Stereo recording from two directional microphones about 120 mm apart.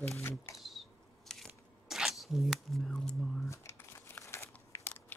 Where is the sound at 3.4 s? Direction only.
25° left (ahead or behind).